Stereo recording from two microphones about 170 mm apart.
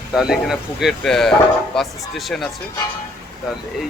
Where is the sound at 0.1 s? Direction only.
Centre (ahead or behind).